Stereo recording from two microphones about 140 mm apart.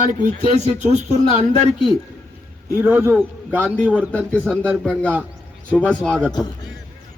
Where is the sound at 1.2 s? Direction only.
40° left (ahead or behind).